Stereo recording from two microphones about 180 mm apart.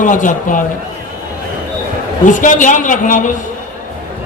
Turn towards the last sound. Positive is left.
turn(degrees=45)  # may be behind; listen again after turning